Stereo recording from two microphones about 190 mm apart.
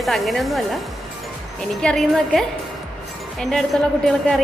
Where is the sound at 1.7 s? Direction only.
5° left (ahead or behind).